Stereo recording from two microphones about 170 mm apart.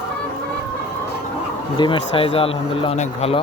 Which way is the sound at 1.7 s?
30° left (ahead or behind).